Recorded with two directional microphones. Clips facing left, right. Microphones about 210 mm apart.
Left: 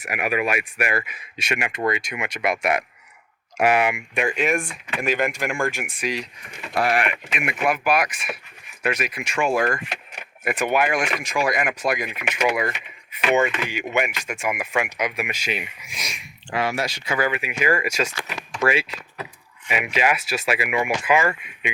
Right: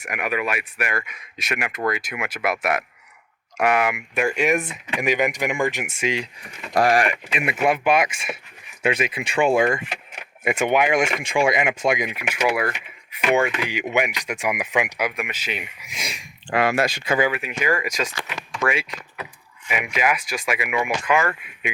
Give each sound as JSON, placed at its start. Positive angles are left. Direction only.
{"t": 0.0, "sound": "speech", "side_deg": 5}
{"t": 6.7, "sound": "speech", "side_deg": -40}
{"t": 7.4, "sound": "speech", "side_deg": -25}
{"t": 9.6, "sound": "speech", "side_deg": -15}
{"t": 15.1, "sound": "speech", "side_deg": 10}
{"t": 16.0, "sound": "speech", "side_deg": -30}
{"t": 16.5, "sound": "speech", "side_deg": -55}
{"t": 17.4, "sound": "speech", "side_deg": 10}
{"t": 18.3, "sound": "speech", "side_deg": 35}
{"t": 21.1, "sound": "speech", "side_deg": 0}